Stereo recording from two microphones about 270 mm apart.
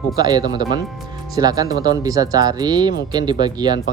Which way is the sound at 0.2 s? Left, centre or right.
Centre.